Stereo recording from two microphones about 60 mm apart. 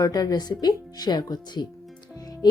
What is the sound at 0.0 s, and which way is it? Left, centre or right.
Speech, left.